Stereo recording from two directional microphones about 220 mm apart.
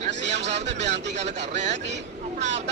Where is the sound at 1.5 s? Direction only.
30° right (ahead or behind).